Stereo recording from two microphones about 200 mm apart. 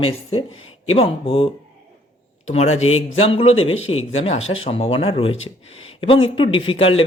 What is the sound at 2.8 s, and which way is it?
Speech, 90° left.